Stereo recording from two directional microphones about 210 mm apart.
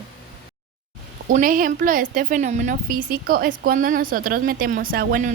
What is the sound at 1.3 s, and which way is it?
A woman's voice, 40° right (ahead or behind).